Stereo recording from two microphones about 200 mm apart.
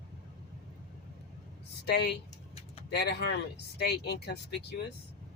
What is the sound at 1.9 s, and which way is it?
Speech, 55° left (ahead or behind).